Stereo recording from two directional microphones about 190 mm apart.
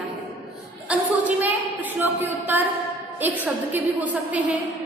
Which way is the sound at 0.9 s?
10° right (ahead or behind).